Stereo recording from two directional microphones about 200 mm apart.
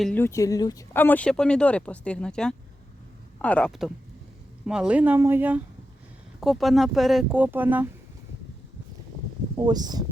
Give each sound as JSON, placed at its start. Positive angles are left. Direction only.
{"t": 0.0, "sound": "speech", "side_deg": 10}
{"t": 9.6, "sound": "speech", "side_deg": -20}